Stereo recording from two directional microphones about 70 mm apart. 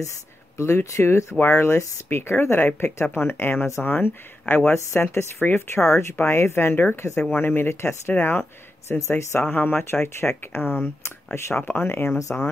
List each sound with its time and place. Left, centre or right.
0.6 s speech: left
9.4 s speech: left
12.3 s speech: left